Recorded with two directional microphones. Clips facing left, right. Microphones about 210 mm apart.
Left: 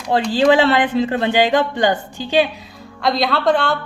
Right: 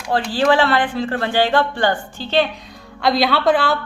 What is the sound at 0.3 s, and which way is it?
Speech, 20° left (ahead or behind).